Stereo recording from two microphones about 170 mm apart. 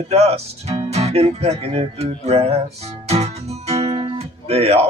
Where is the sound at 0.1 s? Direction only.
40° right (ahead or behind).